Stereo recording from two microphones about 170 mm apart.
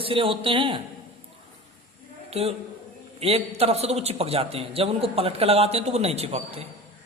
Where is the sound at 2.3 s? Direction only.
35° right (ahead or behind).